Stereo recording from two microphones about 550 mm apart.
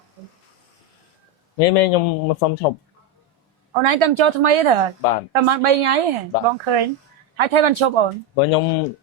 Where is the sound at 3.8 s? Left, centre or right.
Right.